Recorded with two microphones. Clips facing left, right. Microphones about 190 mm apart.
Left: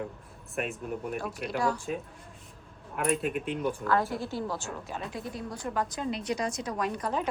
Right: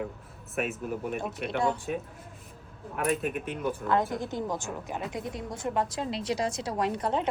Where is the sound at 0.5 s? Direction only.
5° right (ahead or behind).